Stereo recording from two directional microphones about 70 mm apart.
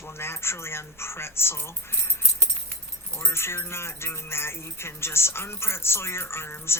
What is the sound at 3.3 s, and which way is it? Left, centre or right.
Speech, left.